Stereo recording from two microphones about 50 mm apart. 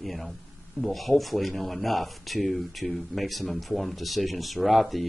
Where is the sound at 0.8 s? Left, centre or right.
Centre.